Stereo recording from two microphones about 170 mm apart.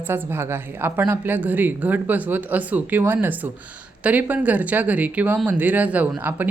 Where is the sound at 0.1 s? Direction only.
15° right (ahead or behind).